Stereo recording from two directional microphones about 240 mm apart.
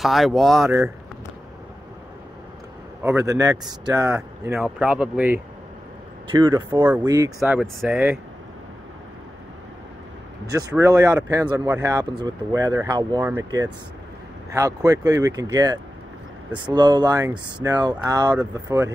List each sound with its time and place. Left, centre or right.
0.0 s speech: centre
3.0 s speech: centre
10.7 s speech: centre